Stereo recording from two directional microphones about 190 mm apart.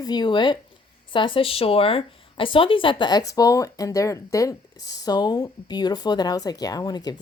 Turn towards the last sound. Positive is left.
turn(degrees=20)  # may be behind; listen again after turning